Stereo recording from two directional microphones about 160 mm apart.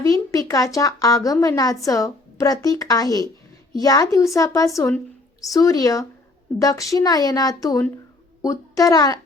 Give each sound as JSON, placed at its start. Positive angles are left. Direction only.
{"t": 0.0, "sound": "a woman's voice", "side_deg": 20}